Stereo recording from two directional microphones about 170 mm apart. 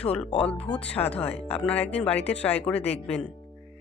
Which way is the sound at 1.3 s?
35° left (ahead or behind).